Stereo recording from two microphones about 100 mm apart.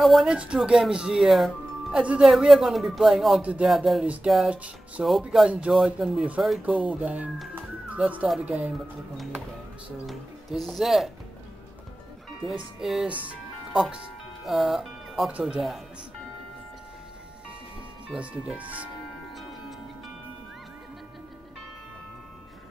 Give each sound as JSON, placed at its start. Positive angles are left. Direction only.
{"t": 0.0, "sound": "speech", "side_deg": 0}
{"t": 4.0, "sound": "speech", "side_deg": -15}
{"t": 5.0, "sound": "speech", "side_deg": 0}
{"t": 7.5, "sound": "music", "side_deg": -15}
{"t": 8.5, "sound": "speech", "side_deg": -10}
{"t": 12.8, "sound": "speech", "side_deg": 0}
{"t": 18.0, "sound": "speech", "side_deg": -10}